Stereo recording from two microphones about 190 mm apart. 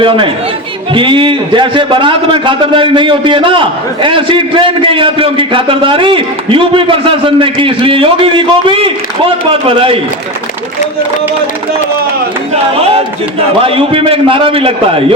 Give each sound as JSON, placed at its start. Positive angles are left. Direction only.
{"t": 0.9, "sound": "a man's voice", "side_deg": -25}
{"t": 12.7, "sound": "a man's voice", "side_deg": -30}